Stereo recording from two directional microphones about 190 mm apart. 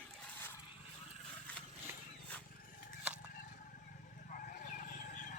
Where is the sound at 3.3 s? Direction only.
50° left (ahead or behind).